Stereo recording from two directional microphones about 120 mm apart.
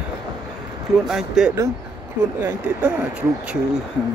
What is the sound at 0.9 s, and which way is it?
Speech, 5° right (ahead or behind).